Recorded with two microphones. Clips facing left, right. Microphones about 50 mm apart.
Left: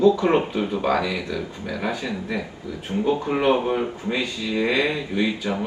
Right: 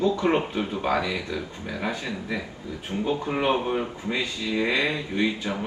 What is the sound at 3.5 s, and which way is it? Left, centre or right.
Speech, centre.